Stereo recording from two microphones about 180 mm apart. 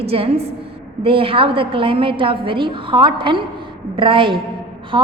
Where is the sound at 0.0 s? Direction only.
35° right (ahead or behind).